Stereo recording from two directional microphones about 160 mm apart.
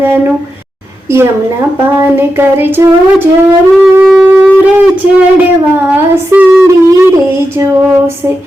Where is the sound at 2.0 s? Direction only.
15° right (ahead or behind).